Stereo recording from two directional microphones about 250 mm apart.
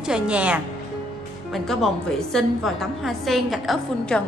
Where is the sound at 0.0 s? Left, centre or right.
Centre.